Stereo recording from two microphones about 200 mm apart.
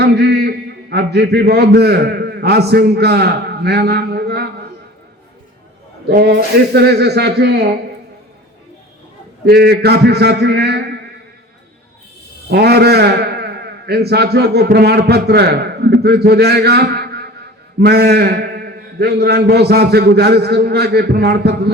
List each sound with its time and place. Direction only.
0.0 s a man's voice: 55° right (ahead or behind)
6.1 s a man's voice: 55° right (ahead or behind)
9.5 s a man's voice: 55° right (ahead or behind)
12.5 s a man's voice: 55° right (ahead or behind)